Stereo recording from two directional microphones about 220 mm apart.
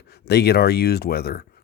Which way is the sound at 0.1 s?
50° left (ahead or behind).